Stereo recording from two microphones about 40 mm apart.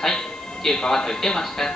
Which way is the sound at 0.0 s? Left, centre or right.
Centre.